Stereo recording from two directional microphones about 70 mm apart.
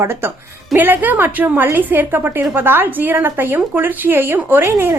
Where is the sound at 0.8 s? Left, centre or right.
Right.